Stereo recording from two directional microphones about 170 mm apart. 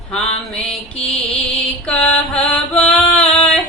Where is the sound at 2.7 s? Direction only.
Centre (ahead or behind).